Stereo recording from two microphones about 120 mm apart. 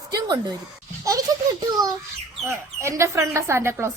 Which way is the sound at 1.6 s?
35° right (ahead or behind).